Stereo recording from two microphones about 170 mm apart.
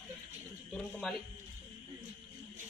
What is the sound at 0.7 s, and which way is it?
Speech, 5° left (ahead or behind).